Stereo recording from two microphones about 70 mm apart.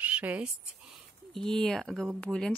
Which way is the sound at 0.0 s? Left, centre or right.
Right.